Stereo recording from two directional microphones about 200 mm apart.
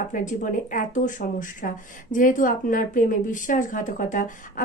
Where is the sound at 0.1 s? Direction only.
40° left (ahead or behind).